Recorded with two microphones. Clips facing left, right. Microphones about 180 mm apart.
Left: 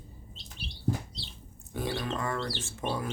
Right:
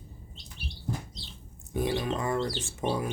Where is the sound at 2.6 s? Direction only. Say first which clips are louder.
Right 3 dB; 15° right (ahead or behind).